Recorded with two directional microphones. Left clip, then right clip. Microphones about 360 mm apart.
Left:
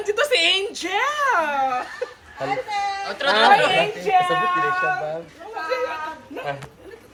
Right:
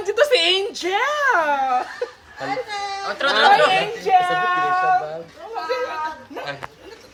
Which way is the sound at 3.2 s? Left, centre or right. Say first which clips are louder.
Right 1 dB; centre.